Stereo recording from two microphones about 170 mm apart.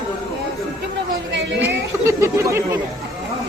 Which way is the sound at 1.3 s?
90° right.